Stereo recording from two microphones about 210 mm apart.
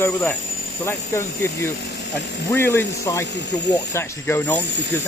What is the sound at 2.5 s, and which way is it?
Speech, 10° left (ahead or behind).